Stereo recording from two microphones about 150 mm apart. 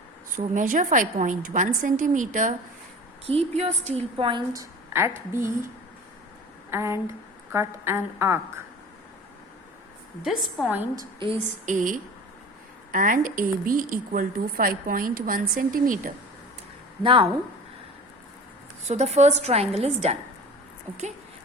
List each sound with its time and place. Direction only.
0.3 s a woman's voice: 60° right (ahead or behind)
3.2 s a woman's voice: 40° right (ahead or behind)
4.9 s a woman's voice: 15° right (ahead or behind)
6.7 s a woman's voice: 20° right (ahead or behind)
10.6 s a woman's voice: centre (ahead or behind)
10.9 s a woman's voice: 35° right (ahead or behind)
11.6 s a woman's voice: 60° right (ahead or behind)
17.0 s a woman's voice: 35° right (ahead or behind)
18.9 s a woman's voice: 50° right (ahead or behind)